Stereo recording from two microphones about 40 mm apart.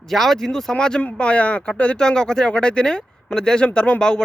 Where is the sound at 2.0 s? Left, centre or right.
Centre.